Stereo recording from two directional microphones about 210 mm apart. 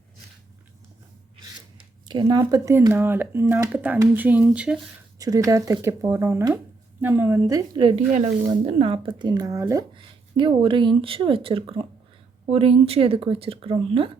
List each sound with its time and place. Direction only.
2.0 s speech: 20° right (ahead or behind); by 4.8 s 5° right (ahead or behind)
5.2 s speech: 15° right (ahead or behind)